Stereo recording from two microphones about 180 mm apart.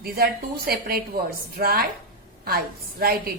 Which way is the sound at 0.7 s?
55° right (ahead or behind).